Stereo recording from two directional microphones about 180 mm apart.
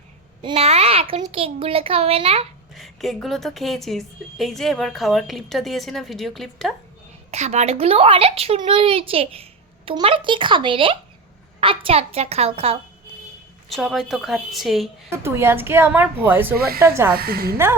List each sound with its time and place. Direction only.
0.4 s a sound: 35° right (ahead or behind)
1.2 s a child's voice: 30° right (ahead or behind)
2.7 s a woman's voice: centre (ahead or behind)
7.3 s a child's voice: 40° right (ahead or behind)
13.7 s a woman's voice: centre (ahead or behind)
15.2 s a woman's voice: 15° right (ahead or behind)
16.6 s a woman's voice: 60° right (ahead or behind)
16.8 s a woman's voice: 15° right (ahead or behind)
17.2 s a woman's voice: 55° right (ahead or behind)